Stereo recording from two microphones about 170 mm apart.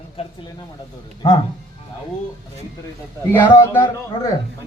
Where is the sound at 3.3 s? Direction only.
10° left (ahead or behind).